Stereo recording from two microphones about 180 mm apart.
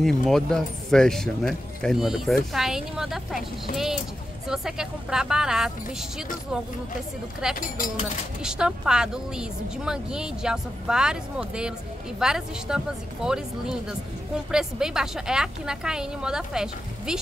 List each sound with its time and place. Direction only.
0.0 s speech: centre (ahead or behind)
7.6 s speech: 50° left (ahead or behind)
8.4 s speech: 5° right (ahead or behind)